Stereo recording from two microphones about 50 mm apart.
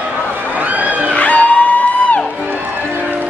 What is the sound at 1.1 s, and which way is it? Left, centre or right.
Music, left.